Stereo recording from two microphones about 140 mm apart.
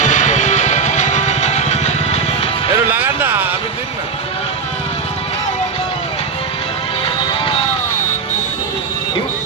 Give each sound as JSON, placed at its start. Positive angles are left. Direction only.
{"t": 0.0, "sound": "music", "side_deg": 60}
{"t": 2.9, "sound": "a sound", "side_deg": -15}
{"t": 7.0, "sound": "music", "side_deg": 40}